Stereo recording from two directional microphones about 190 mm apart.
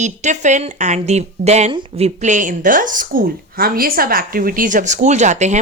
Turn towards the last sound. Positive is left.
turn(degrees=-40)  # may be behind; listen again after turning